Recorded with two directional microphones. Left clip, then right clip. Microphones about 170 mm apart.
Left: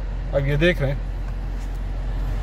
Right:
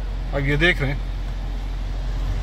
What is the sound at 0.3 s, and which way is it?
Speech, 15° left (ahead or behind).